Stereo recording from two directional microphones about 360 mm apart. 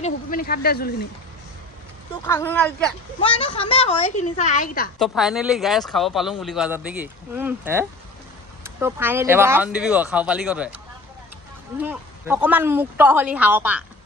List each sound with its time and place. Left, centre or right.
0.0 s speech: left
2.2 s speech: centre
3.2 s a woman's voice: centre
4.9 s speech: centre
11.8 s speech: centre